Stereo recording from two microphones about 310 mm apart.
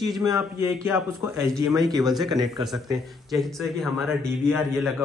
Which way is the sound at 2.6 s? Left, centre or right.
Centre.